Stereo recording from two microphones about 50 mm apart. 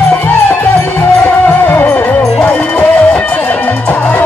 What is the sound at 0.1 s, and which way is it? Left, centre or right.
Music, left.